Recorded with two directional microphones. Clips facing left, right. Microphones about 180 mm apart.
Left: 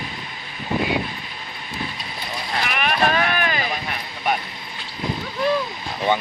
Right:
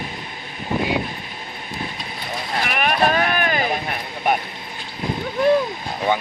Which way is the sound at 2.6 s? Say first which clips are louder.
Right 2 dB; 45° right (ahead or behind).